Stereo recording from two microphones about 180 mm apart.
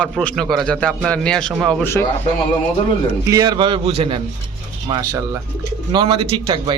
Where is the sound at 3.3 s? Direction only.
25° right (ahead or behind).